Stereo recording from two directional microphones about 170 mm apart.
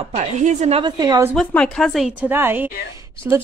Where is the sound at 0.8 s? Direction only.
25° right (ahead or behind).